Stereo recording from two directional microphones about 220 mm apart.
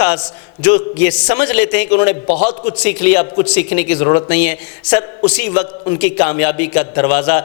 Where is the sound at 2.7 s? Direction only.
10° left (ahead or behind).